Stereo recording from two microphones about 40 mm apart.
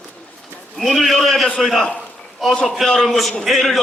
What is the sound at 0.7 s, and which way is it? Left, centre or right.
A man's voice, centre.